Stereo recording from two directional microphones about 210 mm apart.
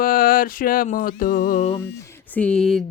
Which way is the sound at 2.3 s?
5° left (ahead or behind).